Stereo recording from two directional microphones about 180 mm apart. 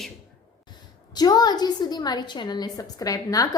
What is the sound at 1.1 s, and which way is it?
A woman's voice, 20° left (ahead or behind).